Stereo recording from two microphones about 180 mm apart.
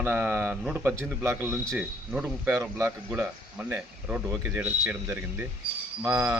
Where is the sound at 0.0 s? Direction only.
15° right (ahead or behind).